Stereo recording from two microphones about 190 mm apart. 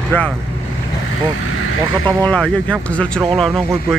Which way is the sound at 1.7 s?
90° left.